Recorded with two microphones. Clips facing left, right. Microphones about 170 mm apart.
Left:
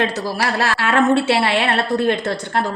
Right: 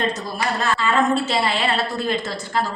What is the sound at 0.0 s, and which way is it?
A woman's voice, 90° left.